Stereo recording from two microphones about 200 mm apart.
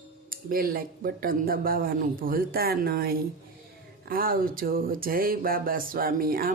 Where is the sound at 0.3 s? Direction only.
45° right (ahead or behind).